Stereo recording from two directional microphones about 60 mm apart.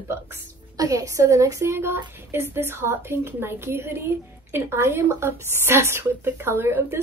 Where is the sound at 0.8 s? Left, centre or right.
Right.